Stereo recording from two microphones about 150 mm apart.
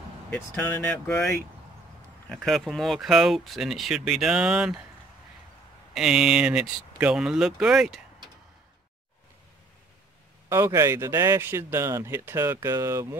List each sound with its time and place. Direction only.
0.3 s speech: 10° left (ahead or behind); by 4.8 s 5° right (ahead or behind)
5.9 s speech: 5° right (ahead or behind)
10.5 s speech: 20° right (ahead or behind)